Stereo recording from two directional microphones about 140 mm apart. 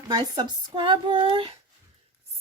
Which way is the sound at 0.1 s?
30° right (ahead or behind).